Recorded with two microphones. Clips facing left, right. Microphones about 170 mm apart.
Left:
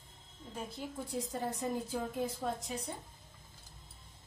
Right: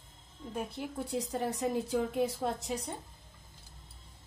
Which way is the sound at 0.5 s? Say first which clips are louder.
Right 4 dB; 70° right (ahead or behind).